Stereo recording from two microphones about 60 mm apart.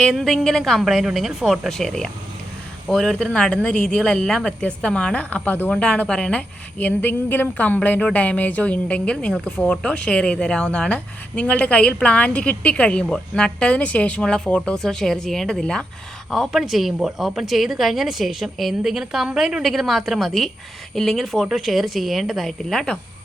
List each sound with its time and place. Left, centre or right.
0.1 s speech: centre
1.8 s speech: centre
5.5 s speech: left
5.8 s speech: centre
6.7 s speech: left; by 15.9 s centre
16.3 s speech: centre
22.7 s speech: centre